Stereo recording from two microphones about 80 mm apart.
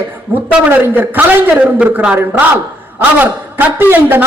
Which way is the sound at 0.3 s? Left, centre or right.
Right.